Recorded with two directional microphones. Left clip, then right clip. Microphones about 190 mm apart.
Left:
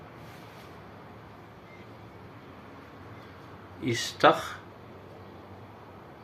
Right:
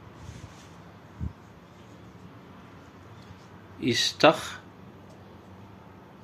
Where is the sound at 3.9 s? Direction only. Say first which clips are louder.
Right 2 dB; 35° right (ahead or behind).